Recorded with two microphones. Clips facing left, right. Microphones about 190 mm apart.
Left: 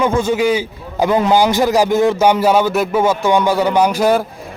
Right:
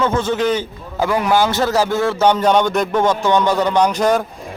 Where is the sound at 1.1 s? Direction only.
20° left (ahead or behind).